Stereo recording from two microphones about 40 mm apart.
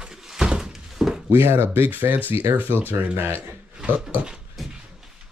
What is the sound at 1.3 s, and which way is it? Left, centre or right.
Speech, right.